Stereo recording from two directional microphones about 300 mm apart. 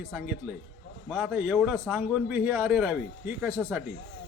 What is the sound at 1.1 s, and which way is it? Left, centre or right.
A man's voice, centre.